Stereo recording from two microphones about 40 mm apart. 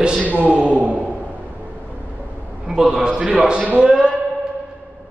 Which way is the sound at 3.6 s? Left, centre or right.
Right.